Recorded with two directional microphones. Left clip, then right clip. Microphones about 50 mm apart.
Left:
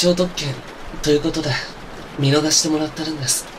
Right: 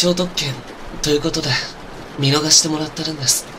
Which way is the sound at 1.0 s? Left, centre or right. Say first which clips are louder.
Even; right.